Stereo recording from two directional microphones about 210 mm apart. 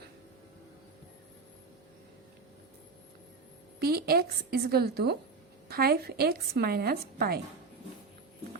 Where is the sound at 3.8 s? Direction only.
45° right (ahead or behind).